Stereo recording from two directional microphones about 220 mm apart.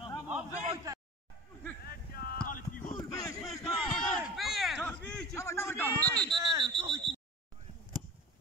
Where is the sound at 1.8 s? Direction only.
45° left (ahead or behind).